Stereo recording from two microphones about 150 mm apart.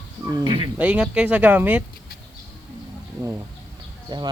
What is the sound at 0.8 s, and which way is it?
Speech, 10° right (ahead or behind).